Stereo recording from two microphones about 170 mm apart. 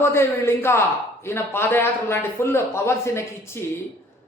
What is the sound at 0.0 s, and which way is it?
A man's voice, 15° left (ahead or behind).